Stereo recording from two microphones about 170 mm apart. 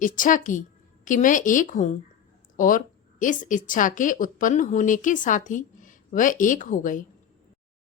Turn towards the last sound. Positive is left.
turn(degrees=50)  # may be behind; listen again after turning